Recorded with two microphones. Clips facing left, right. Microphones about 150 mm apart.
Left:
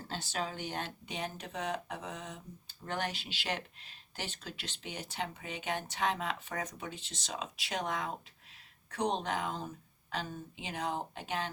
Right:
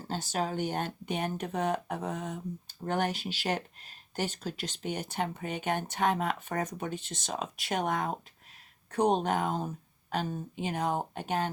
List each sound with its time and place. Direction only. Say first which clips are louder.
0.1 s speech: right 6 dB; 45° right (ahead or behind)